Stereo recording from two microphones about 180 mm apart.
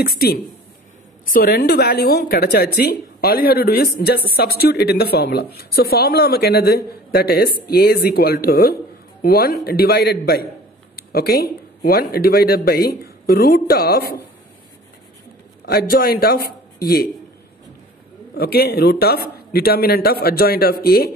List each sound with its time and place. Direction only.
0.0 s a woman's voice: 55° left (ahead or behind)
15.6 s a man's voice: 55° left (ahead or behind)
18.3 s a woman's voice: 60° left (ahead or behind)